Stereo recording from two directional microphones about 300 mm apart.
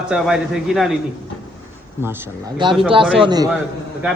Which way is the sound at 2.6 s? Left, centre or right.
Centre.